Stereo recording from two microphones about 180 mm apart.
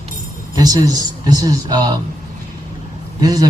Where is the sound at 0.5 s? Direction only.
20° right (ahead or behind).